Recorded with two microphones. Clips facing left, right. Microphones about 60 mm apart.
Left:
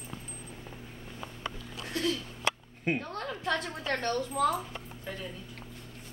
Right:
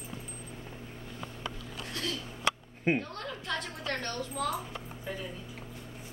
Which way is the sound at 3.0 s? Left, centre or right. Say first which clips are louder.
Left 3 dB; centre.